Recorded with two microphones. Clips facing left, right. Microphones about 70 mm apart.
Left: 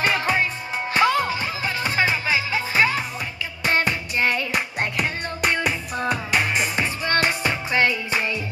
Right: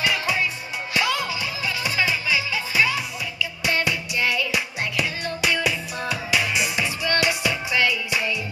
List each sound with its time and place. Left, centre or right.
0.0 s music: left